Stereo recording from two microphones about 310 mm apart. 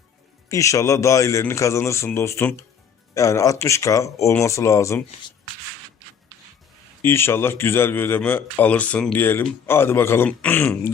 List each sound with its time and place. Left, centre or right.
0.4 s speech: centre
7.0 s speech: centre